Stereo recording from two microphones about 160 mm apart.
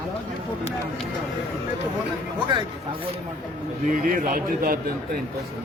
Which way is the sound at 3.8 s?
55° right (ahead or behind).